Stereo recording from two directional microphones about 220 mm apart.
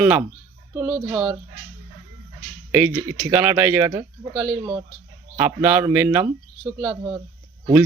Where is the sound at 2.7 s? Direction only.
5° right (ahead or behind).